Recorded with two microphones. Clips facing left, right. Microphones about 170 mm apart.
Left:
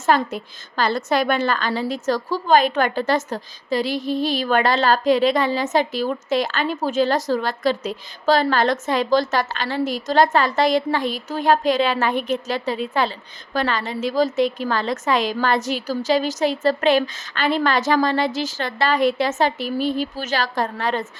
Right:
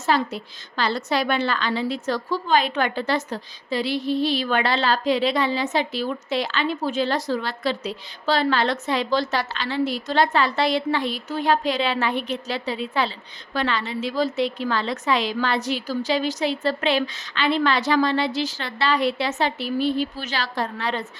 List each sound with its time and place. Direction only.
0.0 s a woman's voice: 50° left (ahead or behind)